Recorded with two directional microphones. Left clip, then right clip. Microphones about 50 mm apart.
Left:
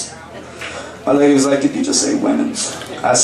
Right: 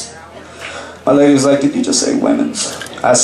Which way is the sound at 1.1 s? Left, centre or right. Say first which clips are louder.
Right 3 dB; right.